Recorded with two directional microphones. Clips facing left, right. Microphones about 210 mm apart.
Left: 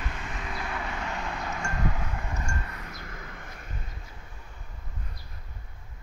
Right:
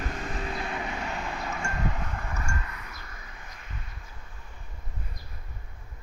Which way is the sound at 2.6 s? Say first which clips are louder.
Left 2 dB; 45° left (ahead or behind).